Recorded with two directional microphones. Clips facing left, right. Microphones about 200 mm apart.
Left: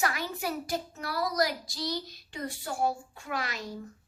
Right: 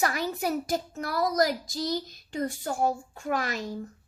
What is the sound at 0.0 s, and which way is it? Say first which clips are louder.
A child's voice: right 4 dB; 40° right (ahead or behind).